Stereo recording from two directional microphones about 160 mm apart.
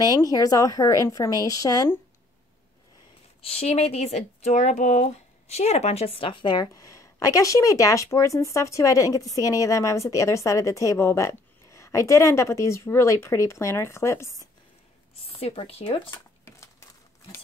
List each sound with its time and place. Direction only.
0.0 s speech: 25° left (ahead or behind)
3.4 s speech: 40° left (ahead or behind); by 14.5 s 20° left (ahead or behind)
15.2 s speech: 40° left (ahead or behind)
16.1 s a sound: 15° left (ahead or behind)